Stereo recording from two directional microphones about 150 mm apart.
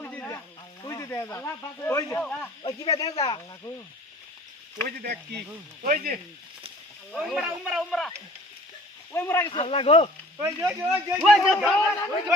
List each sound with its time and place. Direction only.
0.0 s sizzle: 10° left (ahead or behind)
0.9 s speech: 20° left (ahead or behind)
2.6 s speech: 25° left (ahead or behind)
4.9 s speech: 80° right
7.2 s speech: 5° right (ahead or behind)
9.1 s speech: 15° left (ahead or behind)
9.5 s speech: 40° left (ahead or behind)
10.4 s speech: 20° right (ahead or behind)
10.8 s speech: centre (ahead or behind)